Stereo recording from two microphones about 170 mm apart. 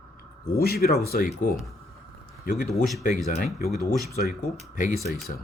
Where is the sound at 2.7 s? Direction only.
Centre (ahead or behind).